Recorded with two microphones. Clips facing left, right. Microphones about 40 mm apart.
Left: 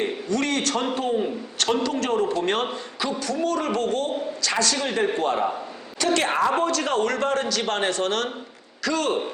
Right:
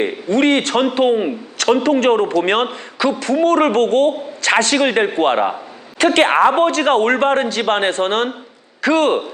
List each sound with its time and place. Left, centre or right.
0.0 s a sound: right
0.9 s a man's voice: right
5.0 s a man's voice: right
5.3 s a man's voice: right